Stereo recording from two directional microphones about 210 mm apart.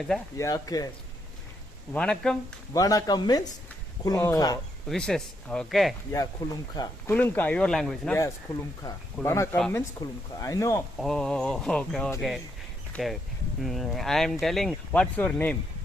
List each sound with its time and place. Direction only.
0.3 s speech: 15° left (ahead or behind)
1.9 s speech: 5° left (ahead or behind)
2.7 s speech: 15° left (ahead or behind)
4.9 s speech: 5° left (ahead or behind)
6.1 s speech: 15° left (ahead or behind)
9.2 s speech: 10° left (ahead or behind)
10.3 s speech: 15° left (ahead or behind)
10.9 s speech: centre (ahead or behind)